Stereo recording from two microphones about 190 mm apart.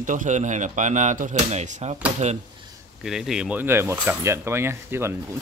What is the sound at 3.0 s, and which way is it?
Speech, centre (ahead or behind).